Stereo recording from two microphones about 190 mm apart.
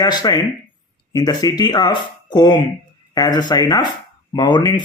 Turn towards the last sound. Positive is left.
turn(degrees=20)  # may be behind; listen again after turning